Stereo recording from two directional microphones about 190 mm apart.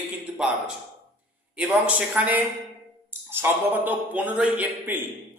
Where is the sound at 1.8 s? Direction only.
5° right (ahead or behind).